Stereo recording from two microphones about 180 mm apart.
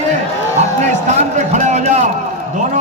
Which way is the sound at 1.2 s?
40° right (ahead or behind).